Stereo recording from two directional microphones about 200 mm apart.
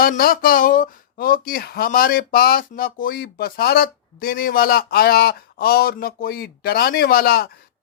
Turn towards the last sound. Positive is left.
turn(degrees=50)  # may be behind; listen again after turning